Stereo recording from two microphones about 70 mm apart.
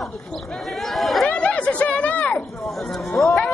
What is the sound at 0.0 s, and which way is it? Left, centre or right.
Chatter, centre.